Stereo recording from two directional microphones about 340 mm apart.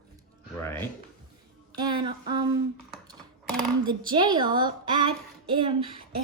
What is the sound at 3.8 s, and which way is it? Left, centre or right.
Speech, centre.